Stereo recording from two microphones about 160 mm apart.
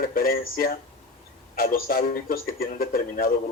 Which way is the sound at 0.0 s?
65° left (ahead or behind).